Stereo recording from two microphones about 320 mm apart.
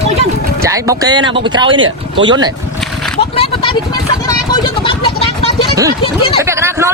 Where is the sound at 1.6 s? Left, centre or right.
Right.